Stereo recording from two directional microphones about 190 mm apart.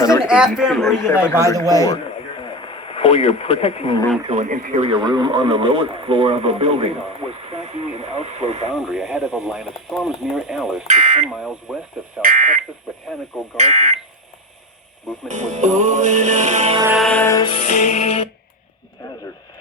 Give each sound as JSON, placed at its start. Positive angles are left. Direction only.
{"t": 0.3, "sound": "speech", "side_deg": -5}
{"t": 1.5, "sound": "a man's voice", "side_deg": -20}
{"t": 2.4, "sound": "a sound", "side_deg": 25}
{"t": 4.3, "sound": "speech", "side_deg": -40}
{"t": 8.7, "sound": "speech", "side_deg": 0}
{"t": 10.8, "sound": "speech", "side_deg": -40}
{"t": 11.3, "sound": "speech", "side_deg": -5}
{"t": 12.2, "sound": "speech", "side_deg": -45}
{"t": 15.3, "sound": "speech", "side_deg": -40}
{"t": 16.9, "sound": "music", "side_deg": 5}
{"t": 17.6, "sound": "music", "side_deg": 40}